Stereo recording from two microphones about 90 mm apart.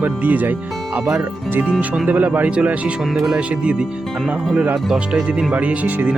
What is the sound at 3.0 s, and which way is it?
Speech, 5° right (ahead or behind).